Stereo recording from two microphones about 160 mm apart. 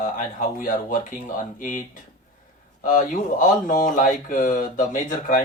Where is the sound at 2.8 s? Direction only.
55° left (ahead or behind).